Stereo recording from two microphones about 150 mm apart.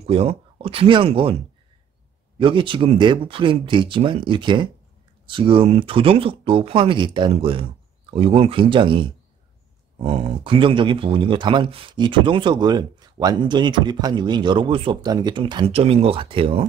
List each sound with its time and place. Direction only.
0.0 s speech: 40° right (ahead or behind)
2.3 s speech: 35° right (ahead or behind)
9.9 s speech: 45° right (ahead or behind)
15.7 s speech: 40° right (ahead or behind)